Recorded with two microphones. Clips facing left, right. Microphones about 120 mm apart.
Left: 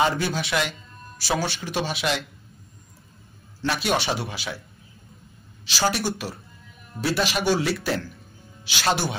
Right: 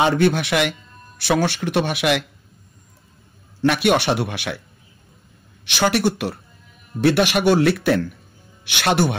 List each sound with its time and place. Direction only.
0.0 s speech: 60° right (ahead or behind)
3.6 s speech: 60° right (ahead or behind)
5.7 s speech: 65° right (ahead or behind)